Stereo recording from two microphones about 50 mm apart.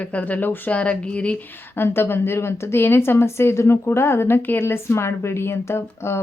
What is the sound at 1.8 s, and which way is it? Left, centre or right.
A woman's voice, left.